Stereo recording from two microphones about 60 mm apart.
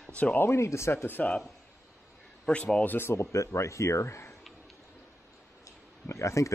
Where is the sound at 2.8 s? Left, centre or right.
Left.